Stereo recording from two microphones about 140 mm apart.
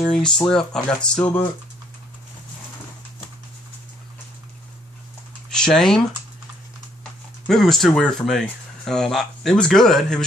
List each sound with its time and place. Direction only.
0.0 s speech: 5° left (ahead or behind)
5.5 s speech: 5° left (ahead or behind)
7.4 s speech: centre (ahead or behind)